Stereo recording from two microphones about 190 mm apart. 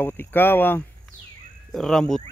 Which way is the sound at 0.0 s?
10° left (ahead or behind).